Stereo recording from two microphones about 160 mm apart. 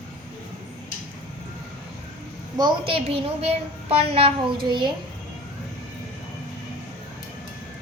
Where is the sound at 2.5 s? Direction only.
30° right (ahead or behind).